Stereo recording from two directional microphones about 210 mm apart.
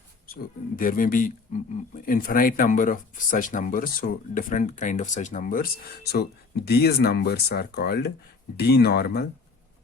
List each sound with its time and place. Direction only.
0.8 s speech: 40° left (ahead or behind)